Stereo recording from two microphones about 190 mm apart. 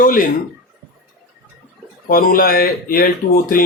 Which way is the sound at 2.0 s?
50° left (ahead or behind).